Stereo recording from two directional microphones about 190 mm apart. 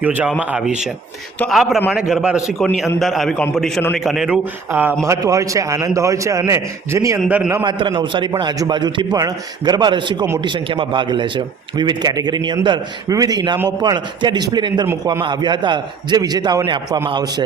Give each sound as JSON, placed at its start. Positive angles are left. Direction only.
{"t": 0.0, "sound": "a man's voice", "side_deg": -10}
{"t": 7.6, "sound": "a man's voice", "side_deg": -25}